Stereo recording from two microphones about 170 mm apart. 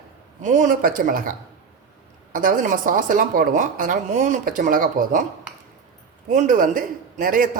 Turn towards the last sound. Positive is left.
turn(degrees=-50)  # may be behind; listen again after turning